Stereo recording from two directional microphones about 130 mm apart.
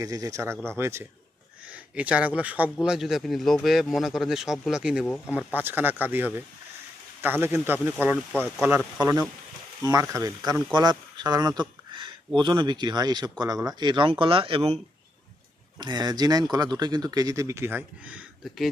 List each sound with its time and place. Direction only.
0.0 s speech: 25° right (ahead or behind); by 5.0 s 5° right (ahead or behind)
5.1 s speech: 15° left (ahead or behind)
5.4 s speech: 10° right (ahead or behind)
8.3 s speech: 5° left (ahead or behind)
9.8 s speech: 25° right (ahead or behind); by 14.8 s 45° right (ahead or behind)
15.8 s speech: 35° right (ahead or behind); by 18.3 s 10° right (ahead or behind)